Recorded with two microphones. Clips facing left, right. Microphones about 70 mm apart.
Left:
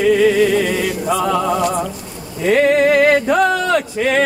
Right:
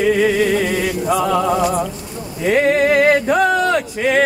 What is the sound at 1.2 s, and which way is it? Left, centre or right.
Music, centre.